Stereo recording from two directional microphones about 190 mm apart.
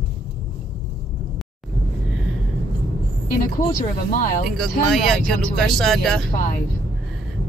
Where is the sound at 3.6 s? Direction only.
45° left (ahead or behind).